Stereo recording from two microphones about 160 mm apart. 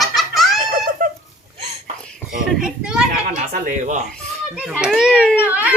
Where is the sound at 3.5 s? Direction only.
50° right (ahead or behind).